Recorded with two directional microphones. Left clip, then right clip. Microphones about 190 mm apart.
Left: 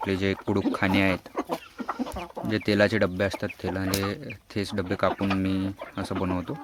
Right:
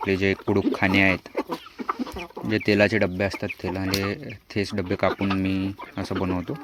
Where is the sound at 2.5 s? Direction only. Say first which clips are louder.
Right 3 dB; 10° right (ahead or behind).